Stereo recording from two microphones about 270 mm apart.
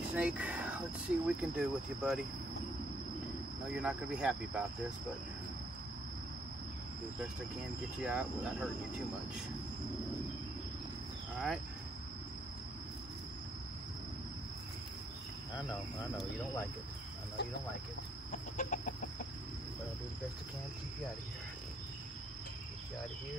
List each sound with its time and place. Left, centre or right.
0.1 s speech: centre
3.7 s speech: centre
8.0 s speech: centre
11.3 s speech: centre
18.3 s chicken: left